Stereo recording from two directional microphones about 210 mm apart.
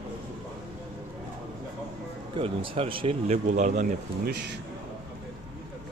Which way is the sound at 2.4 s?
25° right (ahead or behind).